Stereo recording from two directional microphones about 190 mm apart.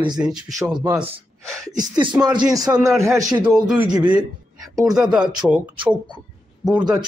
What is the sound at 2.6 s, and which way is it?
Speech, 10° right (ahead or behind).